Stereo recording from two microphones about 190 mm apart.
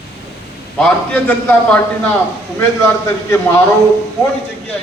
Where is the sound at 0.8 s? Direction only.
5° left (ahead or behind).